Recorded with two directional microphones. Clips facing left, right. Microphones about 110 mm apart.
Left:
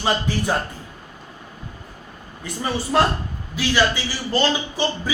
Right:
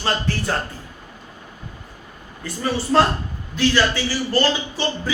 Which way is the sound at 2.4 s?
15° left (ahead or behind).